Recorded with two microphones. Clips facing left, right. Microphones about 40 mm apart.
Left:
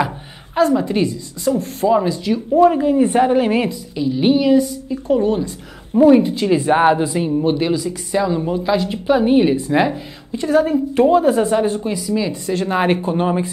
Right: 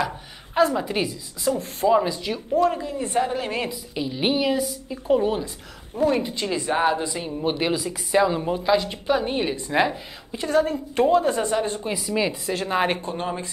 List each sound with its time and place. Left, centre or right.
0.6 s speech: centre
2.8 s a woman's voice: left
3.9 s a woman's voice: centre
5.9 s speech: centre
6.2 s speech: centre
6.5 s a woman's voice: left
7.0 s speech: centre
7.4 s a woman's voice: centre
8.5 s speech: centre
11.9 s a woman's voice: centre
12.4 s speech: centre
13.0 s speech: centre